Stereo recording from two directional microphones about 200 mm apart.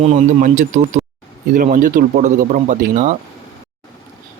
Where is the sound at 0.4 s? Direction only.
40° right (ahead or behind).